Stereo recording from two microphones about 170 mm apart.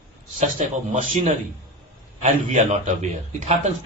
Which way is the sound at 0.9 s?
45° right (ahead or behind).